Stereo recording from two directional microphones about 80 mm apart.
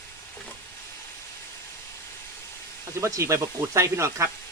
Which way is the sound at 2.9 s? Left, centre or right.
Right.